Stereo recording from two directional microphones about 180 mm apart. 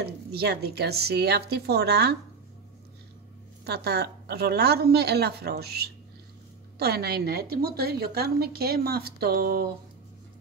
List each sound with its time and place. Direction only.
0.0 s a woman's voice: 60° right (ahead or behind)
3.6 s a woman's voice: 65° right (ahead or behind)